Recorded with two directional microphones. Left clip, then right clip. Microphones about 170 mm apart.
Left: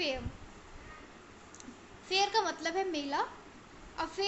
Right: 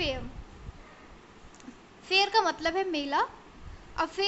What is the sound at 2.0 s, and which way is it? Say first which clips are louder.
A woman's voice: right 5 dB; 20° right (ahead or behind).